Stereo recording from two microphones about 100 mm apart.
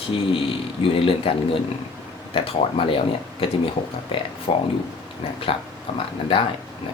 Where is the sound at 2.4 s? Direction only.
65° left (ahead or behind).